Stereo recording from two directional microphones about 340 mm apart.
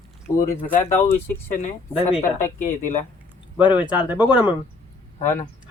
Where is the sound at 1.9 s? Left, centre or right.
Centre.